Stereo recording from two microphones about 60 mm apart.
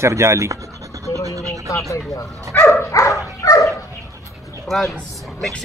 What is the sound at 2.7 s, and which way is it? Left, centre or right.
Dog, left.